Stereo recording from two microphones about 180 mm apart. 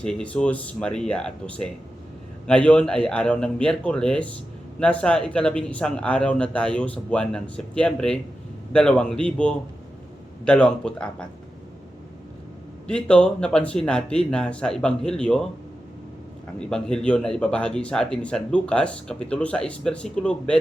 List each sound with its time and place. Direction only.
0.0 s speech: 5° left (ahead or behind)
12.9 s speech: 5° left (ahead or behind)
16.6 s speech: 5° left (ahead or behind)